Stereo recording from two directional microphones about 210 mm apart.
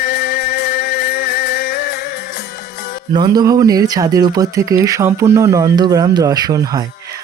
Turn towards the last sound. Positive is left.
turn(degrees=-15)  # may be behind; listen again after turning